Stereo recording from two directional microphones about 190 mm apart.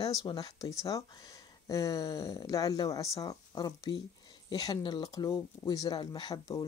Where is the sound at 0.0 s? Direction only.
20° left (ahead or behind).